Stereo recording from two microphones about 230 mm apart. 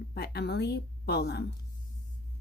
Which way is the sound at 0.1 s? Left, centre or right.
Left.